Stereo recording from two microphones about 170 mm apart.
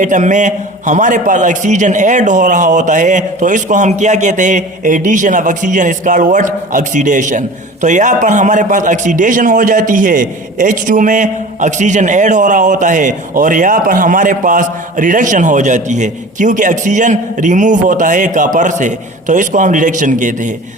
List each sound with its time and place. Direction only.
0.0 s a man's voice: 45° right (ahead or behind)